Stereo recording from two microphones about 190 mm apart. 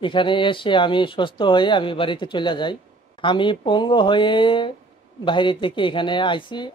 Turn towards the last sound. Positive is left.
turn(degrees=25)  # may be behind; listen again after turning